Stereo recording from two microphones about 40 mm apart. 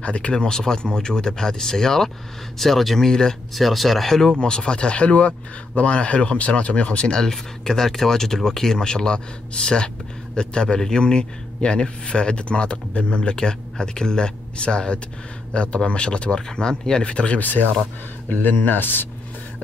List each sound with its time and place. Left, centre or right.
0.0 s speech: left; by 3.1 s centre
3.1 s speech: centre
3.5 s speech: centre
4.1 s a man's voice: centre
17.0 s a man's voice: left
17.4 s speech: left